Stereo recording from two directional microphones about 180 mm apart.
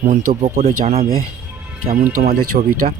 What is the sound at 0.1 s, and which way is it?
Speech, 40° right (ahead or behind).